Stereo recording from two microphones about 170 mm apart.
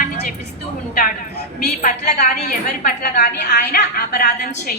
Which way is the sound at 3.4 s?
50° left (ahead or behind).